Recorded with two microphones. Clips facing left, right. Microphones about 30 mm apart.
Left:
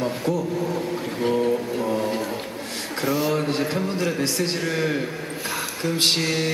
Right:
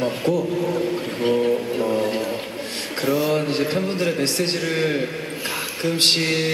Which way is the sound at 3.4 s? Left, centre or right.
Right.